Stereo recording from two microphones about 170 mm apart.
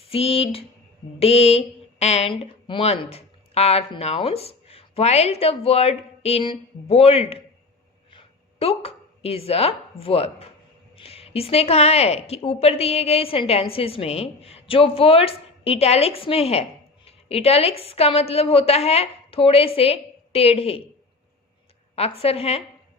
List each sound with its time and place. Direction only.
0.0 s a woman's voice: 35° left (ahead or behind)
21.9 s a woman's voice: 35° left (ahead or behind)